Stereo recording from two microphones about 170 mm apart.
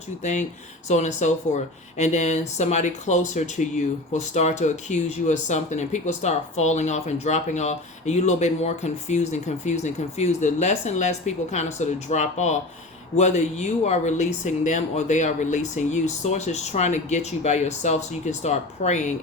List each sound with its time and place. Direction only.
0.2 s speech: 45° left (ahead or behind)